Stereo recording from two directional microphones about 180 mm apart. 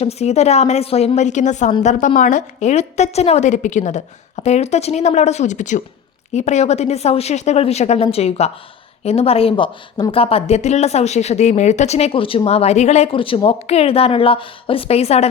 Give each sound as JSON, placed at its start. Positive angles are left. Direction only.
{"t": 0.0, "sound": "speech", "side_deg": 35}